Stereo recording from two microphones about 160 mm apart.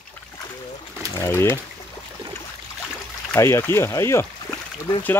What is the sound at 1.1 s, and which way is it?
Speech, 15° left (ahead or behind).